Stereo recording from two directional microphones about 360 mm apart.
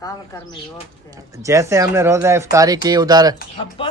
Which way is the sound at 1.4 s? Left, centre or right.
Centre.